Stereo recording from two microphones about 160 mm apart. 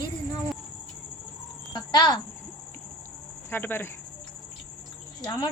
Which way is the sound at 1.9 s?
25° left (ahead or behind).